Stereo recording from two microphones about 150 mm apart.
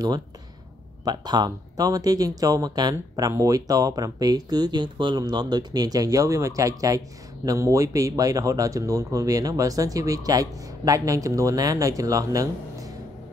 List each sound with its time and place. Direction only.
1.0 s speech: 25° right (ahead or behind)